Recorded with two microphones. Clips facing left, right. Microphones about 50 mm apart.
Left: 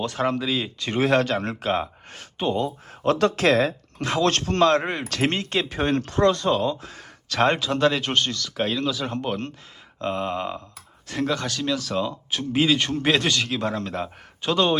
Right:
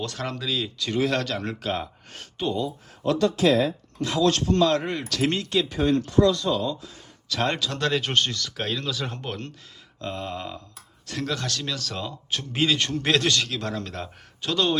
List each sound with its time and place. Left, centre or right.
0.0 s speech: left
2.6 s speech: left
7.8 s speech: centre
10.0 s speech: left